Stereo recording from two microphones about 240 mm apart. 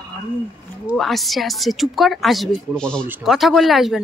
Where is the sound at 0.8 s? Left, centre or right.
Centre.